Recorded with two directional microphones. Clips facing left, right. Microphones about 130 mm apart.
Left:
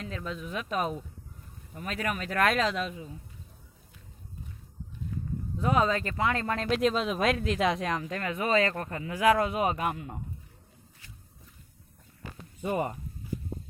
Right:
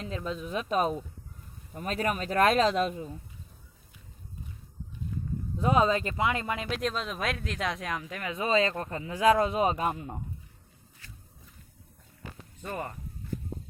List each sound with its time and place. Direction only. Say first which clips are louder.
0.0 s speech: right 2 dB; 25° right (ahead or behind); by 3.2 s 45° right (ahead or behind)
5.5 s speech: right 2 dB; 20° right (ahead or behind); by 8.2 s centre (ahead or behind)
8.2 s speech: right 1 dB; 20° right (ahead or behind)
12.6 s speech: left 6 dB; 15° left (ahead or behind)